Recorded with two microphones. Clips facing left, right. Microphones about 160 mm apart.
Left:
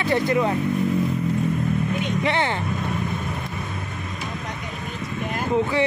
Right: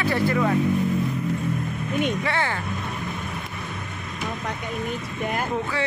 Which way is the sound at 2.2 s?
20° left (ahead or behind).